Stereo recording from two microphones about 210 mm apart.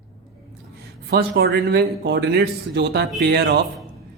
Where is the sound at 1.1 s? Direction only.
60° right (ahead or behind).